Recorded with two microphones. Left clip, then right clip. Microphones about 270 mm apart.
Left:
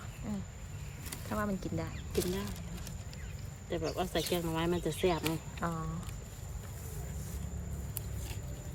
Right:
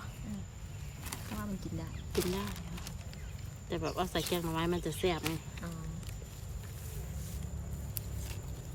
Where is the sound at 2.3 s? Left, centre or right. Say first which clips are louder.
Right 1 dB; centre.